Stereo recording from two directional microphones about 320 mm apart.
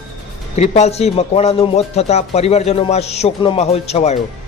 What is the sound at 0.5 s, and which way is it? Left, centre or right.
A man's voice, centre.